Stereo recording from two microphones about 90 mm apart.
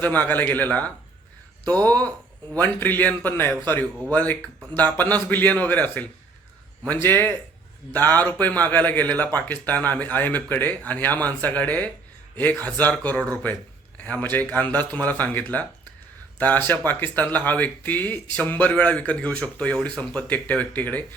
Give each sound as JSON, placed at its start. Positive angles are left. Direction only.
{"t": 0.0, "sound": "a man's voice", "side_deg": 20}